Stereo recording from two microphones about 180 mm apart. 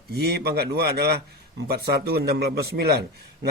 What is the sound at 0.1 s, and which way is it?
A man's voice, 65° right (ahead or behind).